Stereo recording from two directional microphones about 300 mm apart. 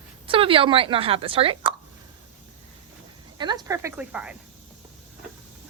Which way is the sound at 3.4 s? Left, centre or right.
Centre.